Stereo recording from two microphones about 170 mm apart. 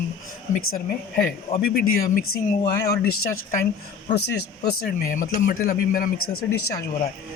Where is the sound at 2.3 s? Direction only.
60° left (ahead or behind).